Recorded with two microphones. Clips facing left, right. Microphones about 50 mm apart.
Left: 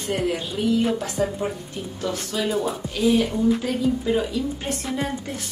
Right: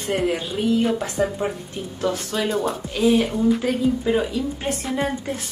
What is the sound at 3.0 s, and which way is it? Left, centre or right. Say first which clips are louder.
Speech: right 2 dB; right.